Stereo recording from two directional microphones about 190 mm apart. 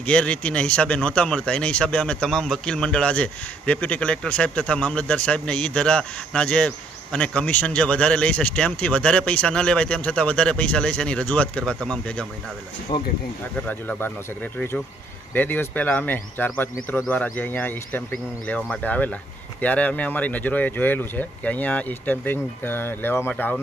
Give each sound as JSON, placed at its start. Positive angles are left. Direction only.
{"t": 0.0, "sound": "speech", "side_deg": 5}
{"t": 12.9, "sound": "speech", "side_deg": 25}
{"t": 13.7, "sound": "speech", "side_deg": 10}